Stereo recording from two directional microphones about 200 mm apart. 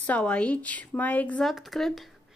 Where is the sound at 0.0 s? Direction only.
5° left (ahead or behind).